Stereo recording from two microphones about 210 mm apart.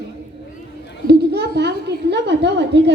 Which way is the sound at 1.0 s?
50° right (ahead or behind).